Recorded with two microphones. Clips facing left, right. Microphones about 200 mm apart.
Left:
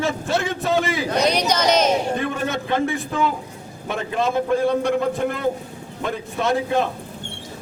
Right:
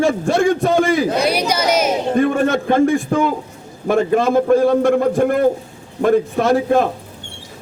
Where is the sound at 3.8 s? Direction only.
50° right (ahead or behind).